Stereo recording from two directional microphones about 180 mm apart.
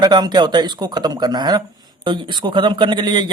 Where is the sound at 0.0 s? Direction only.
20° right (ahead or behind).